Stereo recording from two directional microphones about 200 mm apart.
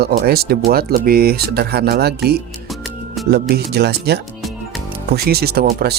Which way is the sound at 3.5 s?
55° right (ahead or behind).